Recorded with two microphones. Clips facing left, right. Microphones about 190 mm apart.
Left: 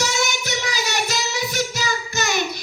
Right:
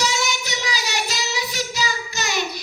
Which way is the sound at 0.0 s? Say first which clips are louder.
Left 1 dB; 50° left (ahead or behind).